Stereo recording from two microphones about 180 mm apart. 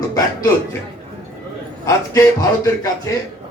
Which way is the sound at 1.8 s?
20° left (ahead or behind).